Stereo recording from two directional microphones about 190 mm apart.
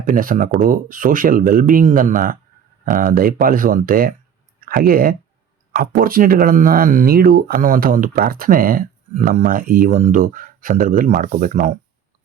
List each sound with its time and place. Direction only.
0.0 s speech: 45° right (ahead or behind)